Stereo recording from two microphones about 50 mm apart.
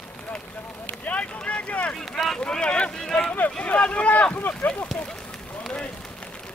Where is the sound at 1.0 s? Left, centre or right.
Left.